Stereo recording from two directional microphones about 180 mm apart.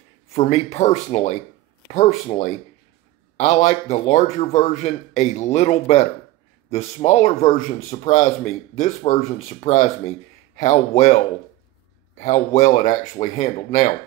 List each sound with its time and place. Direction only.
0.3 s speech: 35° left (ahead or behind)